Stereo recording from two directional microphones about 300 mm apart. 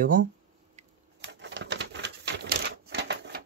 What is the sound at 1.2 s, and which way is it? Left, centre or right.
Typewriter, right.